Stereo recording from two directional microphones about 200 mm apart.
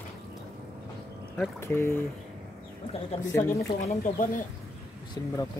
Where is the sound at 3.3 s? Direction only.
15° left (ahead or behind).